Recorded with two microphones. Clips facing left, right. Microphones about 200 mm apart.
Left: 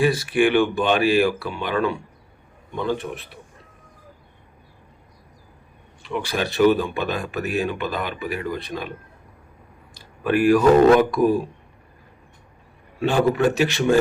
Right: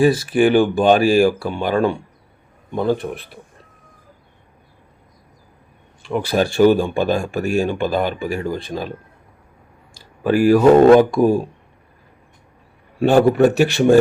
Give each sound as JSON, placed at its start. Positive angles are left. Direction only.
{"t": 0.0, "sound": "speech", "side_deg": -40}
{"t": 6.1, "sound": "speech", "side_deg": -40}
{"t": 9.9, "sound": "speech", "side_deg": -25}
{"t": 13.0, "sound": "speech", "side_deg": -55}